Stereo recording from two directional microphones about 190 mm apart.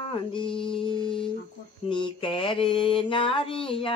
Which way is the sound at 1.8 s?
25° left (ahead or behind).